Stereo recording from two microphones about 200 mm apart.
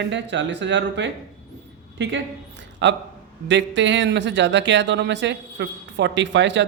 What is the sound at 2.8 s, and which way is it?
Speech, 65° right (ahead or behind).